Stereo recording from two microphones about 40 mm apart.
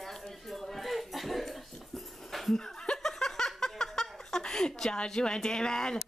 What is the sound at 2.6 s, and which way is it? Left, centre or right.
Chuckle, centre.